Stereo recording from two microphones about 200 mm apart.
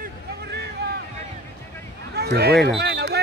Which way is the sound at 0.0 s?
55° right (ahead or behind).